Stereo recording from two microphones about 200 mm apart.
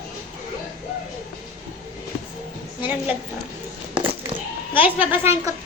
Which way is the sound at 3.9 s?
25° right (ahead or behind).